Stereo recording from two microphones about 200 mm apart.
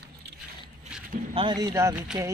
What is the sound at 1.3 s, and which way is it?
Speech, 25° right (ahead or behind).